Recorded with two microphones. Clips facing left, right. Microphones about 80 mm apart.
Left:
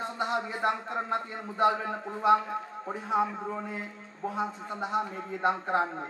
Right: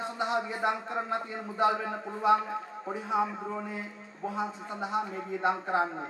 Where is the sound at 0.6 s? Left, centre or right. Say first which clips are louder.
Left 1 dB; centre.